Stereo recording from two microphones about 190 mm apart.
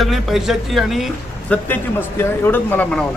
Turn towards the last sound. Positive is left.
turn(degrees=5)  # may be behind; listen again after turning